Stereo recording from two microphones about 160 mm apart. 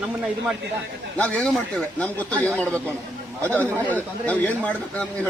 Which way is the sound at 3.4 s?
10° left (ahead or behind).